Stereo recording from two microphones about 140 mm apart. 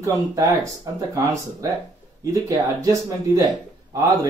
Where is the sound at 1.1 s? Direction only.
20° right (ahead or behind).